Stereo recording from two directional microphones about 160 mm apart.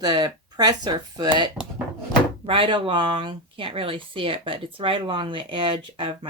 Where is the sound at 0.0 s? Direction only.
25° right (ahead or behind).